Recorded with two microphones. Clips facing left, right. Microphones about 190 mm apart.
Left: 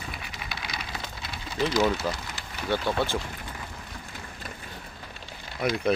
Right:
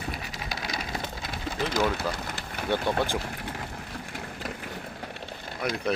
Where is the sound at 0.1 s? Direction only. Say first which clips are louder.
Right 3 dB; 40° right (ahead or behind).